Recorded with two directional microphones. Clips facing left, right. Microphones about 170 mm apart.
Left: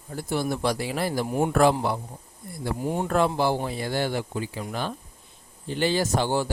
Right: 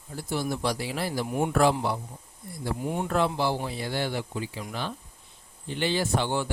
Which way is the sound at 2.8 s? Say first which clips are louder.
Left 3 dB; 35° left (ahead or behind).